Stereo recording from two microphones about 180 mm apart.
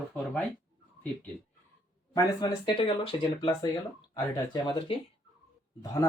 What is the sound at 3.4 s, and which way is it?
Speech, 20° left (ahead or behind).